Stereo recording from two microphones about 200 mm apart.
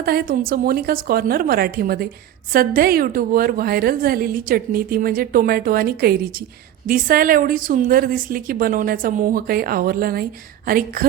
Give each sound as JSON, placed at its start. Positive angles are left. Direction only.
{"t": 0.0, "sound": "a woman's voice", "side_deg": -50}